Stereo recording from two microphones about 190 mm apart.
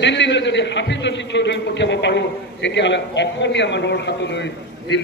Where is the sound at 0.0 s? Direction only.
70° left (ahead or behind).